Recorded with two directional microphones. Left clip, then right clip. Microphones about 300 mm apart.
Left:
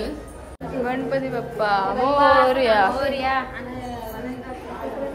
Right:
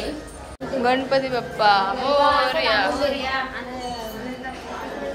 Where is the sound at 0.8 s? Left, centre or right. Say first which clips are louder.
Right 4 dB; centre.